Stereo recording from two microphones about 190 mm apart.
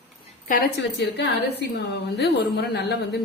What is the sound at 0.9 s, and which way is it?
A woman's voice, 65° left (ahead or behind).